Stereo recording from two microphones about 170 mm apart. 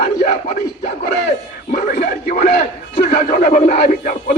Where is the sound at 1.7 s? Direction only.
55° left (ahead or behind).